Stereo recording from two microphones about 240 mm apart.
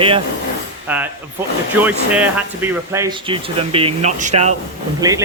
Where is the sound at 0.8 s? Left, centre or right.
Centre; by 4.5 s right.